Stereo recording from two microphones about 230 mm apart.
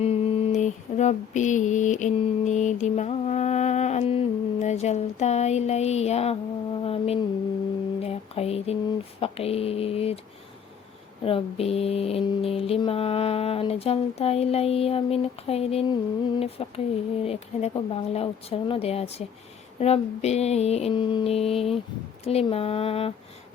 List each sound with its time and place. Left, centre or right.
0.0 s mantra: left
6.7 s a sound: left
9.2 s music: left
11.2 s music: left